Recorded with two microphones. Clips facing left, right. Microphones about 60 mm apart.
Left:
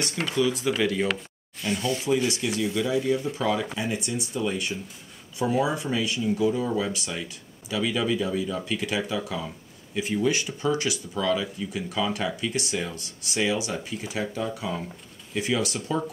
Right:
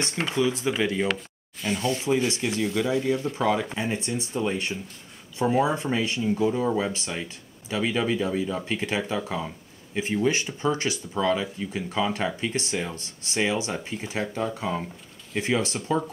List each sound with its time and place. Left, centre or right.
0.0 s speech: right
0.9 s speech: centre
1.8 s speech: centre